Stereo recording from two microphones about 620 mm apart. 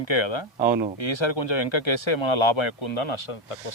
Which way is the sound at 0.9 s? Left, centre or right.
Left.